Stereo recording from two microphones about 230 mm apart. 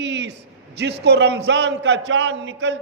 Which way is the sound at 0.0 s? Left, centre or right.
Right.